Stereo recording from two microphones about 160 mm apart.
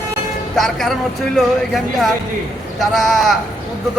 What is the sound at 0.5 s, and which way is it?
Speech, centre (ahead or behind).